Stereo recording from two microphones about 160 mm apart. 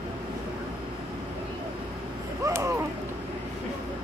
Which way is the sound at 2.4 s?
20° right (ahead or behind).